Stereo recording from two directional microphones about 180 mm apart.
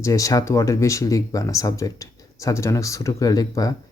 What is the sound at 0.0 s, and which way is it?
Speech, 20° left (ahead or behind).